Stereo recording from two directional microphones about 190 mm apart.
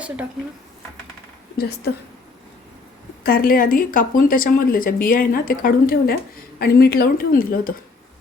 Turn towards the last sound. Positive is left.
turn(degrees=50)  # may be behind; listen again after turning